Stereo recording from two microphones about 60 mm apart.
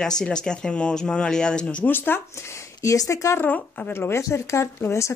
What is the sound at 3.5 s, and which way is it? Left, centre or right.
Speech, left.